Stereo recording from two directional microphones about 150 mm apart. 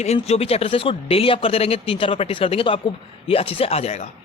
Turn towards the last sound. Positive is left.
turn(degrees=45)  # may be behind; listen again after turning